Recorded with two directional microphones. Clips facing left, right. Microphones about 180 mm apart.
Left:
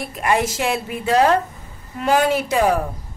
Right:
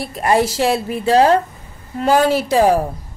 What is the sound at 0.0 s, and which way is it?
Speech, 35° right (ahead or behind).